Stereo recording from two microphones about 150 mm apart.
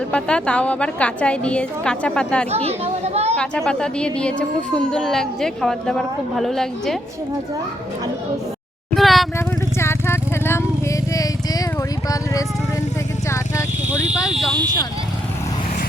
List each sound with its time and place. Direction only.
0.1 s a woman's voice: 5° left (ahead or behind)
2.5 s speech: 45° right (ahead or behind)
3.3 s a woman's voice: 5° left (ahead or behind)
9.0 s a sound: centre (ahead or behind)
9.7 s vehicle: 15° left (ahead or behind)
11.1 s a sound: 25° left (ahead or behind)